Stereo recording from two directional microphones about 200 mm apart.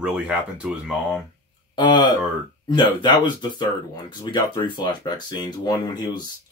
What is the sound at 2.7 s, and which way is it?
Speech, 20° left (ahead or behind).